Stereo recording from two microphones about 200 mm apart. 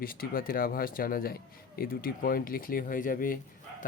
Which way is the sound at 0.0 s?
45° left (ahead or behind).